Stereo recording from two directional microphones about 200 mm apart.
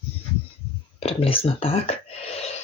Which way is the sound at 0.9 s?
30° left (ahead or behind).